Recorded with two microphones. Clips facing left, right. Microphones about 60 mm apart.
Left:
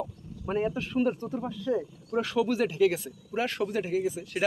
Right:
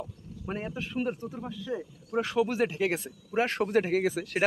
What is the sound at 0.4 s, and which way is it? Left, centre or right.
Speech, centre.